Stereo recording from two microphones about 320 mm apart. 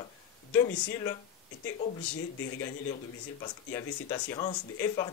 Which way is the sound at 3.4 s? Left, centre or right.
Centre.